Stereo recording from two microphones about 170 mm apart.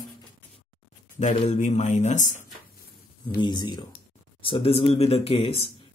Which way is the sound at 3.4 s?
25° left (ahead or behind).